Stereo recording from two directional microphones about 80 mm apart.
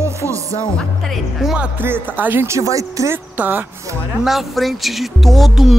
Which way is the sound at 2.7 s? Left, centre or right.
Right.